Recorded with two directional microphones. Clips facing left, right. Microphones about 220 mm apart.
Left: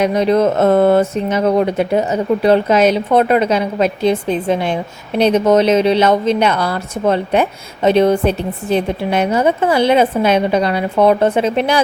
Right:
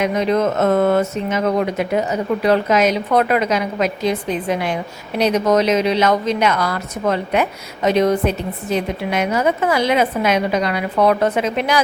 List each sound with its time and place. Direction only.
0.0 s a woman's voice: 35° left (ahead or behind)